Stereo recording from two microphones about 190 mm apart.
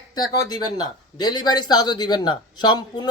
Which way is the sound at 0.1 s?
20° left (ahead or behind).